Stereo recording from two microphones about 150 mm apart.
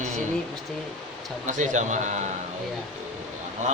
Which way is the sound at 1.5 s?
55° right (ahead or behind).